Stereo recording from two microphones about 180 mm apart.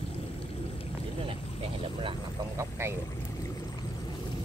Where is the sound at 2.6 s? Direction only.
15° right (ahead or behind).